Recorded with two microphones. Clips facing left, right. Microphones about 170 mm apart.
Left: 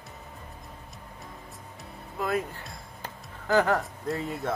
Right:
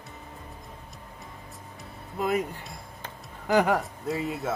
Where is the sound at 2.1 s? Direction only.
15° right (ahead or behind).